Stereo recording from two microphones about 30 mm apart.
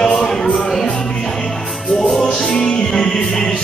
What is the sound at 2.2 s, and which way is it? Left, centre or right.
Music, left.